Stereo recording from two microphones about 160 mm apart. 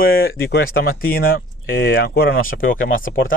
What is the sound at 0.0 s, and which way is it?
Speech, 70° left (ahead or behind).